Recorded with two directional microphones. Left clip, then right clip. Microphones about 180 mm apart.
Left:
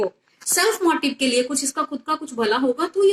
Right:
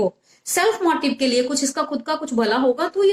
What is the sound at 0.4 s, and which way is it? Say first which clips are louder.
A woman's voice: right 1 dB; 45° right (ahead or behind).